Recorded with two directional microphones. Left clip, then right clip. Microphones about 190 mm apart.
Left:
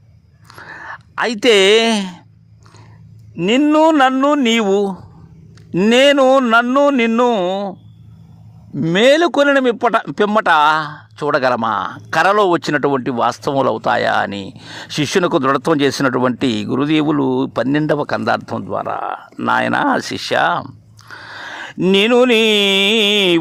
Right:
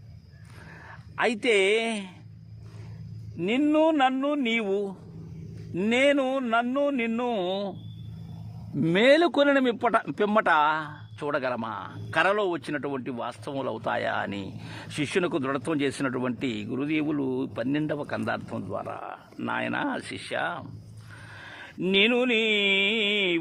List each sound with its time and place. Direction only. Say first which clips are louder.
0.7 s a woman's voice: left 17 dB; 45° left (ahead or behind)
3.3 s a man's voice: left 11 dB; 45° left (ahead or behind); by 7.8 s 30° left (ahead or behind)
8.7 s speech: left 7 dB; 20° left (ahead or behind)
9.0 s a man's voice: left 9 dB; 30° left (ahead or behind)
21.2 s a sound: left 14 dB; 45° left (ahead or behind)